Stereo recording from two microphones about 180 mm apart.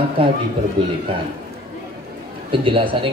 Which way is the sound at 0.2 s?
30° right (ahead or behind).